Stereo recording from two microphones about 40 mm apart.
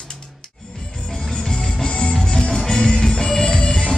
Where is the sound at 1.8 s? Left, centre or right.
Left.